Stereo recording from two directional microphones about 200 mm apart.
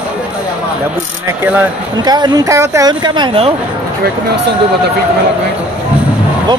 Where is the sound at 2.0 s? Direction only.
20° right (ahead or behind).